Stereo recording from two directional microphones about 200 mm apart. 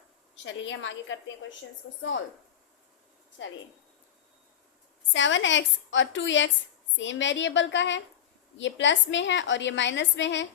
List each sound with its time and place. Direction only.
0.4 s a woman's voice: 70° left (ahead or behind)
5.1 s a woman's voice: 70° left (ahead or behind)